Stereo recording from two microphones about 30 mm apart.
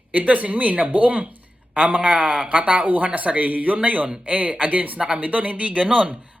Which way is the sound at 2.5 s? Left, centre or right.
Right.